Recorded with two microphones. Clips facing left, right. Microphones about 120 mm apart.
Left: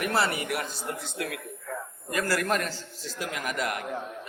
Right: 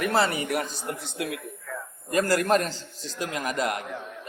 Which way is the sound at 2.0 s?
25° right (ahead or behind).